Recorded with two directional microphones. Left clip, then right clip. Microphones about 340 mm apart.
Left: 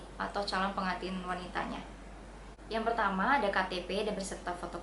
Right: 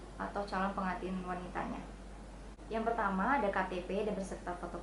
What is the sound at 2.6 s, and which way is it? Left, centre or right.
A woman's voice, centre.